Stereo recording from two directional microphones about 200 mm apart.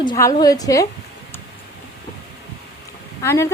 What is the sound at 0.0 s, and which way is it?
Speech, 20° left (ahead or behind).